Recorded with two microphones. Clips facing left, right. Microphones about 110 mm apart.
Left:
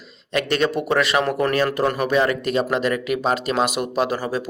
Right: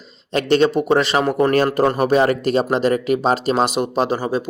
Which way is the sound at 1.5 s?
40° right (ahead or behind).